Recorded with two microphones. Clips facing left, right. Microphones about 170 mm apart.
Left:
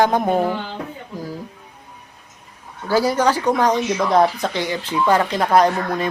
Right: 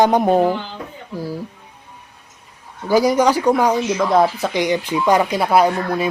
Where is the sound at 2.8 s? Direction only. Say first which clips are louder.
Right 3 dB; 15° right (ahead or behind).